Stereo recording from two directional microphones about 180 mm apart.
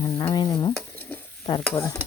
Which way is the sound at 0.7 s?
10° left (ahead or behind).